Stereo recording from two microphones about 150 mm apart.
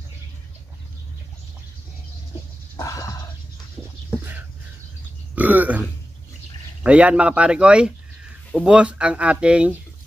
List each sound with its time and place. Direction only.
2.8 s a sound: 20° left (ahead or behind)
5.3 s burping: 10° right (ahead or behind)
6.8 s speech: 10° right (ahead or behind)